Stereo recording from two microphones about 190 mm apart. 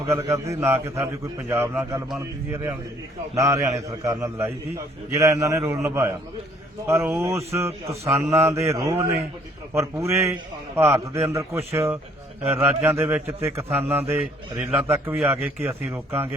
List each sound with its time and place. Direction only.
0.1 s a man's voice: 15° right (ahead or behind)